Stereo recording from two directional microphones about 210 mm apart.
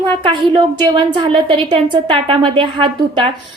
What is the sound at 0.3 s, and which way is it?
A woman's voice, 25° right (ahead or behind).